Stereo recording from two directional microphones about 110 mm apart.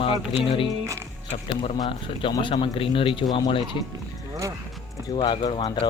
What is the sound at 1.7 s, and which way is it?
Speech, 45° left (ahead or behind).